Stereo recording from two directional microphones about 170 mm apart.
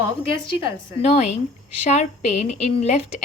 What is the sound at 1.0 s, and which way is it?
A woman's voice, 40° left (ahead or behind).